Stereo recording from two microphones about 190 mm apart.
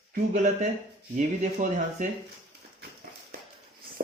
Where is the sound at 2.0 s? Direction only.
40° right (ahead or behind).